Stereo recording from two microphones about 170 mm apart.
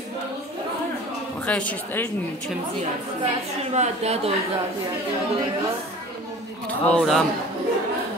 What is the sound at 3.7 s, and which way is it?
Speech, 40° right (ahead or behind).